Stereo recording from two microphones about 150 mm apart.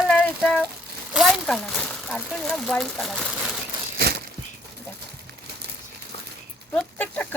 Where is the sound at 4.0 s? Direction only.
90° right.